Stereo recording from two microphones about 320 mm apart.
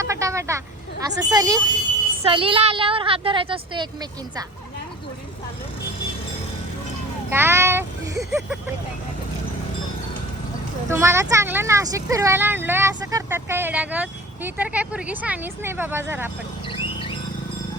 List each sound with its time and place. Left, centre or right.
0.0 s vehicle: centre
1.0 s speech: centre
7.3 s speech: centre
10.9 s speech: centre
16.6 s a sound: centre